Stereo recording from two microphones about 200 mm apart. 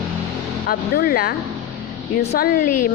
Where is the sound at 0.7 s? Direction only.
50° left (ahead or behind).